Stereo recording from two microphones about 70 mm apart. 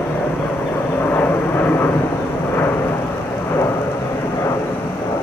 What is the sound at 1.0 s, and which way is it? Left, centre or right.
Vehicle, left.